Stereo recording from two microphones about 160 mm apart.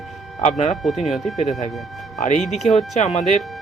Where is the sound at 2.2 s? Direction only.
50° left (ahead or behind).